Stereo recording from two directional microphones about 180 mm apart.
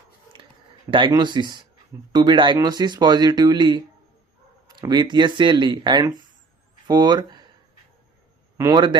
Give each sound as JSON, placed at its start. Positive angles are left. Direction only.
{"t": 0.3, "sound": "a sound", "side_deg": -25}
{"t": 0.9, "sound": "speech", "side_deg": -30}
{"t": 8.5, "sound": "a man's voice", "side_deg": -20}